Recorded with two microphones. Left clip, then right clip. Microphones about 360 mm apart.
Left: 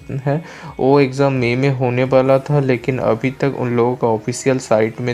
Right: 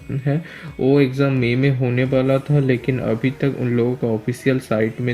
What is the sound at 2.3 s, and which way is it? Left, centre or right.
Speech, left.